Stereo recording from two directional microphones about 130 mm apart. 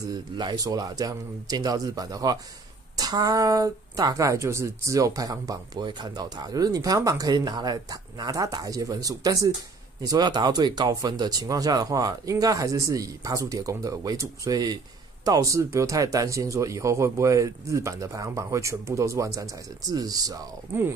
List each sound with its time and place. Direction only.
0.1 s speech: 35° right (ahead or behind)